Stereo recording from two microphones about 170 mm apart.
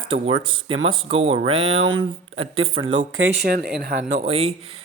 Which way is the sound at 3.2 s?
70° right (ahead or behind).